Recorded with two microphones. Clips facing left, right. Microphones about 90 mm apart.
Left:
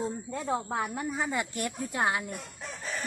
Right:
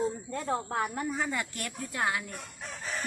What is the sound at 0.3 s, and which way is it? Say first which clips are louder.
Speech: left 1 dB; 5° left (ahead or behind).